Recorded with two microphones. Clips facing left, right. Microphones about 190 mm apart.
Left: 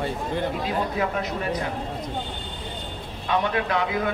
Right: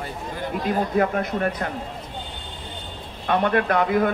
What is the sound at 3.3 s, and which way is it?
Speech, 50° right (ahead or behind).